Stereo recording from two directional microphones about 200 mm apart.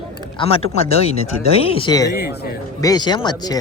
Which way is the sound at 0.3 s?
30° left (ahead or behind).